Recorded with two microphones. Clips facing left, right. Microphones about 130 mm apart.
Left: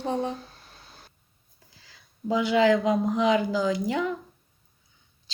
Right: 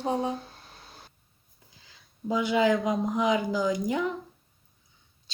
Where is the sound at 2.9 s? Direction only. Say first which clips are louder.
Left 3 dB; 20° right (ahead or behind).